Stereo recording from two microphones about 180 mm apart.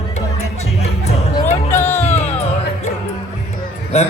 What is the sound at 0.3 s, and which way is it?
Music, 35° left (ahead or behind).